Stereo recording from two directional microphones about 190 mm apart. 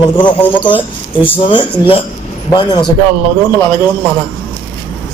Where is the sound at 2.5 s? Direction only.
20° left (ahead or behind).